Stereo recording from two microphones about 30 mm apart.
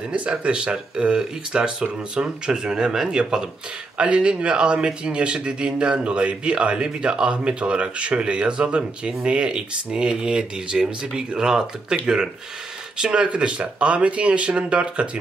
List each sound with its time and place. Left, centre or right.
0.3 s speech: right
4.0 s speech: right